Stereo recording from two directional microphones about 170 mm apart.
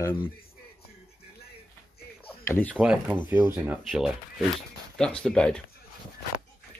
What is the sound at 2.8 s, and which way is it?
Speech, 5° right (ahead or behind).